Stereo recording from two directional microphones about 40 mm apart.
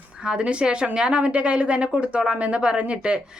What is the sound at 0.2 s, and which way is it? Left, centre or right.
A woman's voice, right.